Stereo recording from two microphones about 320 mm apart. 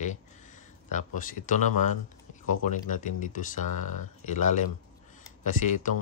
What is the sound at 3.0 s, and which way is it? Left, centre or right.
Speech, left.